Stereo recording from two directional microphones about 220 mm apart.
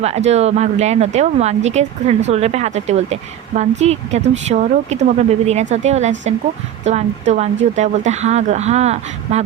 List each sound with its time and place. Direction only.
0.0 s speech: 30° right (ahead or behind)